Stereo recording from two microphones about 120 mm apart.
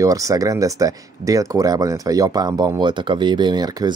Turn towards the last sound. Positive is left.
turn(degrees=-35)  # may be behind; listen again after turning